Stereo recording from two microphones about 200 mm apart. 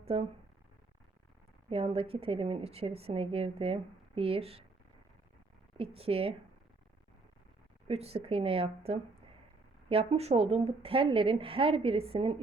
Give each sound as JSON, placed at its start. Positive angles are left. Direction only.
{"t": 0.0, "sound": "speech", "side_deg": -30}
{"t": 1.7, "sound": "a woman's voice", "side_deg": -30}
{"t": 5.7, "sound": "a woman's voice", "side_deg": -30}
{"t": 7.9, "sound": "a woman's voice", "side_deg": -30}